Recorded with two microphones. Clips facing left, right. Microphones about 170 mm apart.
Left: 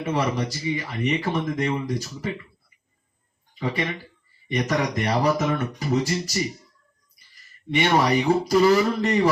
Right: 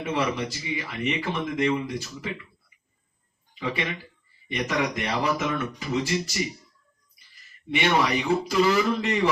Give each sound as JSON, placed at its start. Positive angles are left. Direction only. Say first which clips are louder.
{"t": 0.0, "sound": "speech", "louder": "left 2 dB", "side_deg": 40}
{"t": 3.5, "sound": "a sound", "louder": "left 2 dB", "side_deg": 40}
{"t": 4.5, "sound": "speech", "louder": "left 3 dB", "side_deg": 40}
{"t": 7.7, "sound": "speech", "louder": "left 3 dB", "side_deg": 40}